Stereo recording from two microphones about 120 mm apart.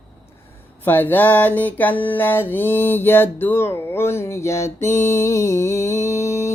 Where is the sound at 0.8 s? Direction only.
15° left (ahead or behind).